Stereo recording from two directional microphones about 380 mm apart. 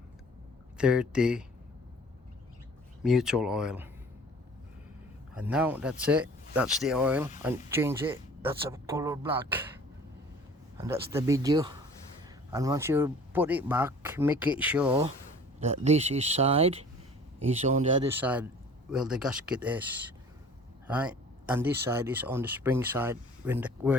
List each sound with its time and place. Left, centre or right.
0.8 s speech: centre
3.0 s speech: centre
5.3 s speech: centre
10.8 s speech: centre
15.6 s speech: centre
18.1 s speech: centre